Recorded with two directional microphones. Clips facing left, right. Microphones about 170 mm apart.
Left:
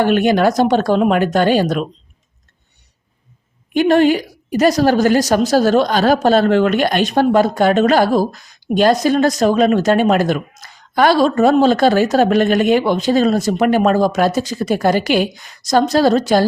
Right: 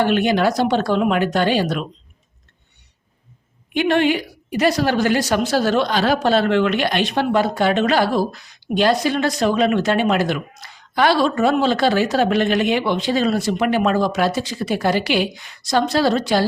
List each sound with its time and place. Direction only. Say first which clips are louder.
0.0 s a woman's voice: left 4 dB; 45° left (ahead or behind)
3.8 s a woman's voice: left 5 dB; 40° left (ahead or behind)